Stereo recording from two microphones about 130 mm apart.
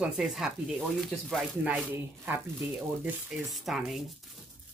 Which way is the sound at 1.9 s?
15° right (ahead or behind).